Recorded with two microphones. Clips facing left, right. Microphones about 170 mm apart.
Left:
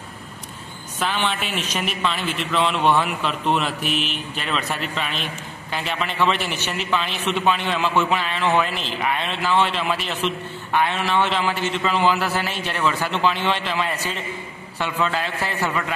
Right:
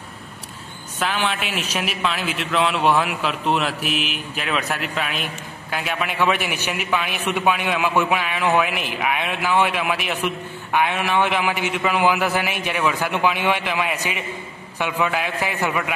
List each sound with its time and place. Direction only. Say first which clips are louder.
0.9 s a man's voice: right 1 dB; 5° right (ahead or behind)